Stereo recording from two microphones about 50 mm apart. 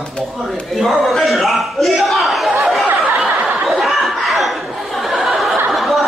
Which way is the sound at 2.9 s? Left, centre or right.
Right.